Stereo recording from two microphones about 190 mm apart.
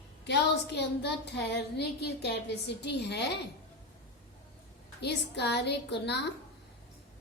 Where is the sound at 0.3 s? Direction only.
65° left (ahead or behind).